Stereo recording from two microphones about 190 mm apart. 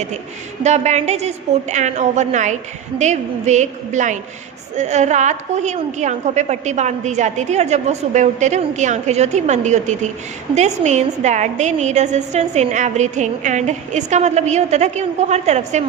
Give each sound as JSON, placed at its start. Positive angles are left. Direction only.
{"t": 0.6, "sound": "a woman's voice", "side_deg": -35}